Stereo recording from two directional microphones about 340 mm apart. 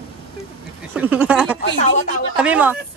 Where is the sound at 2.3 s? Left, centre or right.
Centre.